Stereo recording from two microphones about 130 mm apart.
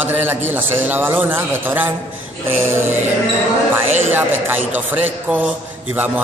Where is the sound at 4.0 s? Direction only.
15° right (ahead or behind).